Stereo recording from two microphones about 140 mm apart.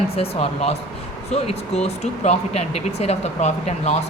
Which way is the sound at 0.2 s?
45° left (ahead or behind).